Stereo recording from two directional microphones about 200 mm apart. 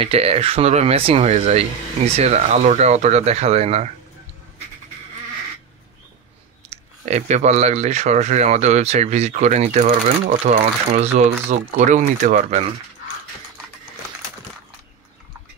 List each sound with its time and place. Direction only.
0.0 s speech: 30° right (ahead or behind)
6.7 s speech: 35° right (ahead or behind)
9.8 s speech: 45° right (ahead or behind)